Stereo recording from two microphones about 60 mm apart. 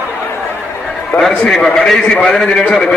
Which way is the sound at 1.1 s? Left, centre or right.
Centre.